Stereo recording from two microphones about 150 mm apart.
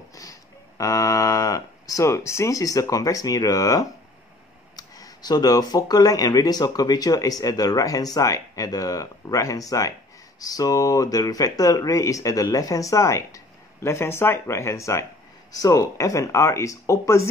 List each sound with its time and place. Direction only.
0.1 s speech: 20° left (ahead or behind)